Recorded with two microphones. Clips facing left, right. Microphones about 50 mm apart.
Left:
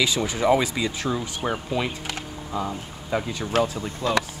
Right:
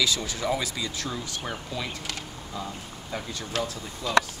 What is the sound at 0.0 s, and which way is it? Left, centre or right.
Speech, left.